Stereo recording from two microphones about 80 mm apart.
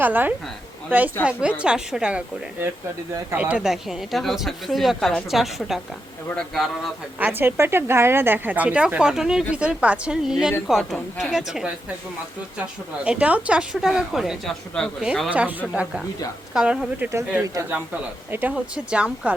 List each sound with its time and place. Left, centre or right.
0.0 s a woman's voice: right
3.3 s speech: centre
3.6 s speech: centre
7.2 s a woman's voice: right; by 11.7 s centre
13.1 s a woman's voice: centre
15.3 s a woman's voice: centre